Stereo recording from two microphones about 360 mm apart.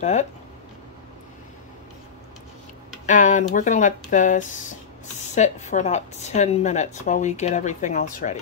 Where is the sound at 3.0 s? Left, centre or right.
Left.